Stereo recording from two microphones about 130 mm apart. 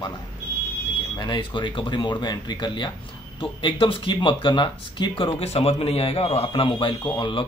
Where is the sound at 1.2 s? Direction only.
35° left (ahead or behind).